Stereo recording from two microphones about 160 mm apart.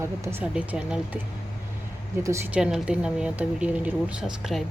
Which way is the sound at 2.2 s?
15° right (ahead or behind).